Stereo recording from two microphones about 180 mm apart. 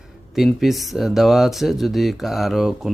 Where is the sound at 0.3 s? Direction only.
Centre (ahead or behind).